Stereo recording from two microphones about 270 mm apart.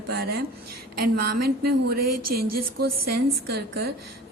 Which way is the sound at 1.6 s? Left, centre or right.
Right.